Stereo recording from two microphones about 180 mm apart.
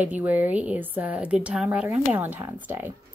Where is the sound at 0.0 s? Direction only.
10° right (ahead or behind).